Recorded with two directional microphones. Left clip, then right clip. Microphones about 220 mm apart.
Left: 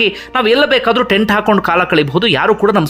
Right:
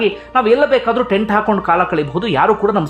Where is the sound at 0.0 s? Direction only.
15° left (ahead or behind).